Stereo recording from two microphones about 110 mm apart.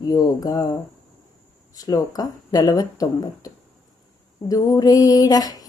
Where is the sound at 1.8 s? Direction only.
35° left (ahead or behind).